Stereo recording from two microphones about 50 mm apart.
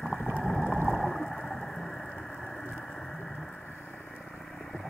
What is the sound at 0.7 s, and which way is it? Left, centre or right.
Whale vocalization, right.